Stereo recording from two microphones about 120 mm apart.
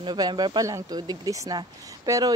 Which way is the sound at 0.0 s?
40° right (ahead or behind).